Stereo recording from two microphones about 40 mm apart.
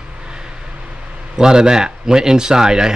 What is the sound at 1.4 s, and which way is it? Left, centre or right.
Speech, centre.